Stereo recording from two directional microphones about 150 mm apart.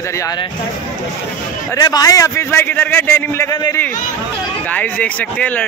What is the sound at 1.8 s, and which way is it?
A man's voice, 25° left (ahead or behind).